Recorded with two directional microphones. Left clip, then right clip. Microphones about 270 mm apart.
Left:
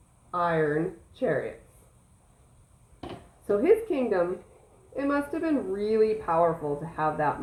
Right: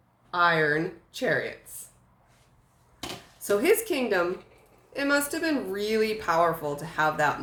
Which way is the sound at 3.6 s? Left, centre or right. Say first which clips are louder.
Left 2 dB; right.